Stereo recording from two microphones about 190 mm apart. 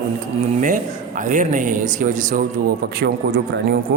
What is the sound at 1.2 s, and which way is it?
Speech, 45° right (ahead or behind).